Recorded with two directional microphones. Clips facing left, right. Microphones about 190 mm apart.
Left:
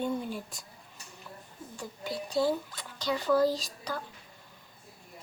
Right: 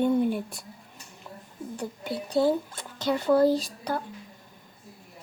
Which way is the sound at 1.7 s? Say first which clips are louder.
Right 4 dB; 60° right (ahead or behind).